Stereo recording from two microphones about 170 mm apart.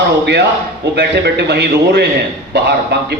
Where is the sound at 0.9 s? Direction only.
85° right.